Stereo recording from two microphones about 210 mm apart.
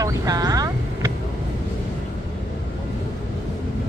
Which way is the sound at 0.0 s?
15° right (ahead or behind).